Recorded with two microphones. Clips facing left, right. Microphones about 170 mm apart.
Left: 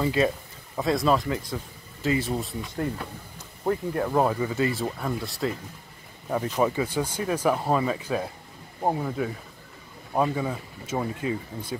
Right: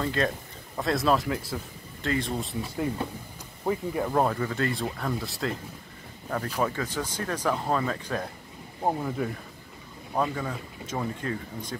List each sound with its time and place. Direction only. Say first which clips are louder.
0.0 s speech: left 4 dB; 5° left (ahead or behind)
3.6 s speech: left 2 dB; 5° right (ahead or behind)
10.1 s speech: left 3 dB; 10° left (ahead or behind)